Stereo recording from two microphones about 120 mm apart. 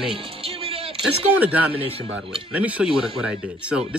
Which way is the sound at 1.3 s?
15° right (ahead or behind).